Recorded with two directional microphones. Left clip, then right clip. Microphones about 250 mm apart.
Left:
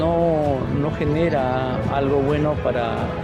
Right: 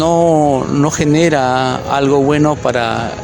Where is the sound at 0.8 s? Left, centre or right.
Right.